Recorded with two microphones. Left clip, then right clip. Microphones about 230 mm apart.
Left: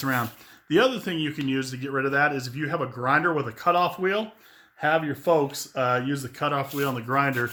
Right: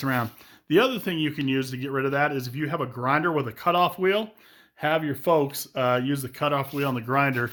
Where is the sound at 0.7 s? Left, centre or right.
Right.